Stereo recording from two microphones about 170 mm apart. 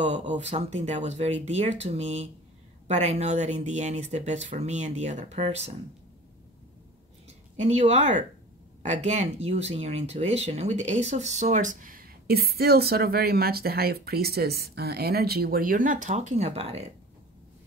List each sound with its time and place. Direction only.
0.0 s speech: 45° right (ahead or behind)
7.5 s speech: 40° right (ahead or behind)